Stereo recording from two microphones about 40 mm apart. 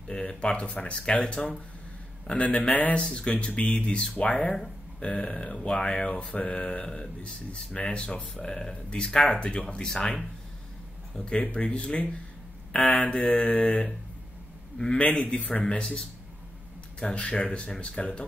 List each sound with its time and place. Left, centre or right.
0.1 s speech: left
2.3 s mantra: left
3.0 s speech: left
4.2 s mantra: left
5.0 s speech: left
5.9 s mantra: left
6.3 s speech: left; by 9.2 s centre
9.3 s mantra: left
9.8 s speech: centre
11.2 s speech: left
12.7 s mantra: left
14.9 s mantra: left
15.7 s speech: left
17.0 s speech: left